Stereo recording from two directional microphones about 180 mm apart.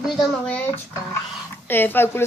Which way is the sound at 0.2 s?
5° left (ahead or behind).